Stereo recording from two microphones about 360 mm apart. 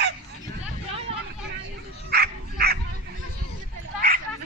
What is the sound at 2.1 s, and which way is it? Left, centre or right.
Dog, right.